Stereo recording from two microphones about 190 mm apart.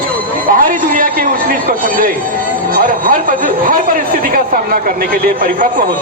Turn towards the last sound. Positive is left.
turn(degrees=-50)  # may be behind; listen again after turning